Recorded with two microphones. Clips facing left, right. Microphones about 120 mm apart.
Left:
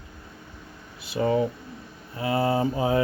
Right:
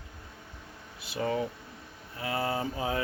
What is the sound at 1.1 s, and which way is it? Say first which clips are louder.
Speech: left 7 dB; 25° left (ahead or behind).